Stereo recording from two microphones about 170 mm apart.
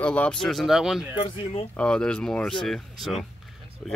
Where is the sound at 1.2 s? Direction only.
35° left (ahead or behind).